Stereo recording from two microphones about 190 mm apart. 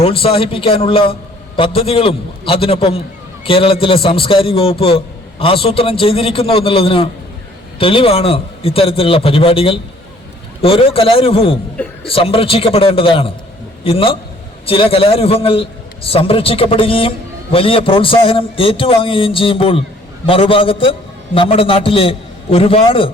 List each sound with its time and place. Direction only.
0.0 s a man's voice: 30° left (ahead or behind)